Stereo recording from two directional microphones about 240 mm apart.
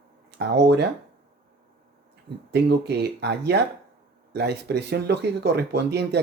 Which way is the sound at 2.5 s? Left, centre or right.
Right.